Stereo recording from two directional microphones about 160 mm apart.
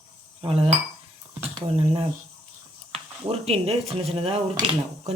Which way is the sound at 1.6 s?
35° right (ahead or behind).